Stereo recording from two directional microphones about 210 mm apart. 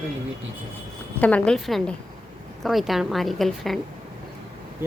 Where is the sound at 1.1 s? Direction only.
5° left (ahead or behind).